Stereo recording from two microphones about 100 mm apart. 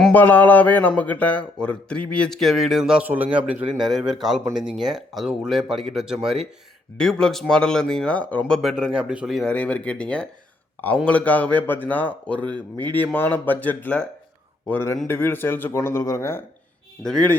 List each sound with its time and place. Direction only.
0.1 s a man's voice: 15° left (ahead or behind); by 3.0 s 5° right (ahead or behind)
3.0 s a man's voice: 15° right (ahead or behind); by 8.6 s 10° left (ahead or behind)
8.6 s a man's voice: 10° right (ahead or behind)
9.5 s a man's voice: 10° left (ahead or behind)
12.5 s speech: 50° right (ahead or behind)
12.8 s a man's voice: 15° left (ahead or behind)
17.0 s a man's voice: 5° left (ahead or behind)